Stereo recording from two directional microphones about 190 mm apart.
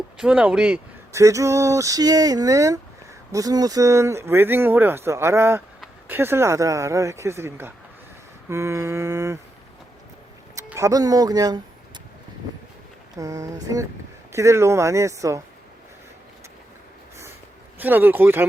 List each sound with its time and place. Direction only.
0.2 s speech: 5° right (ahead or behind)
1.1 s speech: 15° right (ahead or behind)
10.5 s speech: 15° right (ahead or behind)
13.1 s speech: 20° right (ahead or behind)
17.7 s speech: 10° right (ahead or behind)